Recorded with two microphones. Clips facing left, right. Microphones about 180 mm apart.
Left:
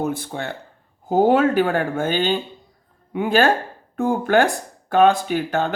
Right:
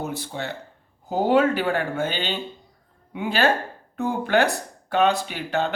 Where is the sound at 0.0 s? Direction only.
50° left (ahead or behind).